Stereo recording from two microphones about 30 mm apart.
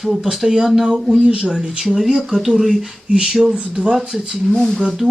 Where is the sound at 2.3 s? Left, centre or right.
Centre.